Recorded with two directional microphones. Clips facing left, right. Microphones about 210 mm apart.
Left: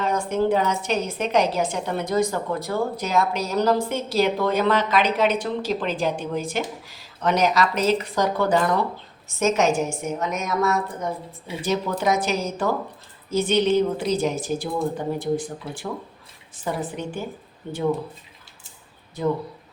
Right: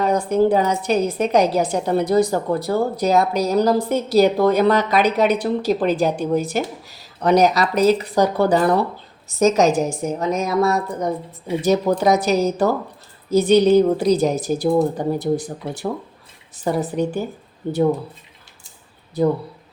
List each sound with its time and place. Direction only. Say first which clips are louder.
0.0 s a woman's voice: right 5 dB; 35° right (ahead or behind)